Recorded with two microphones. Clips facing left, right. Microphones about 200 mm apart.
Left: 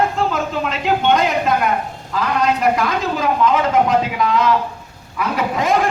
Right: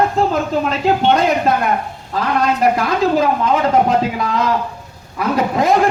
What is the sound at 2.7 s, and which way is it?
Speech, 35° right (ahead or behind).